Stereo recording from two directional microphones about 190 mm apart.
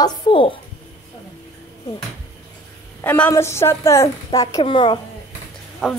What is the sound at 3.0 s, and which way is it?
A woman's voice, 10° left (ahead or behind).